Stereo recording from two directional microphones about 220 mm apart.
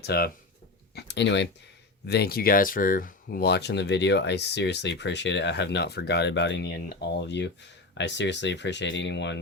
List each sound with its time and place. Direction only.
0.0 s speech: 45° left (ahead or behind)